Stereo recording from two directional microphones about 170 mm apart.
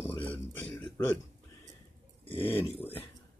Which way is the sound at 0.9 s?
15° left (ahead or behind).